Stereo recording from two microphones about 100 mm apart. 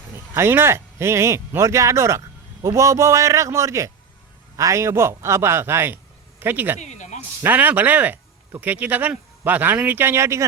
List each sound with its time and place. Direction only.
0.3 s a man's voice: 25° right (ahead or behind)